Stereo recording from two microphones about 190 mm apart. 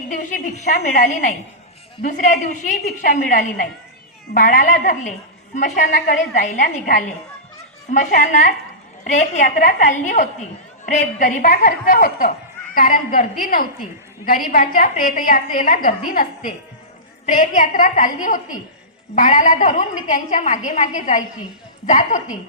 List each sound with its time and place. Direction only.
0.1 s a woman's voice: 45° left (ahead or behind)
17.2 s a woman's voice: 45° left (ahead or behind)